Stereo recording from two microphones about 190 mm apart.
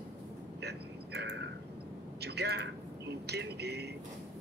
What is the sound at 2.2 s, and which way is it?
A man's voice, 60° right (ahead or behind).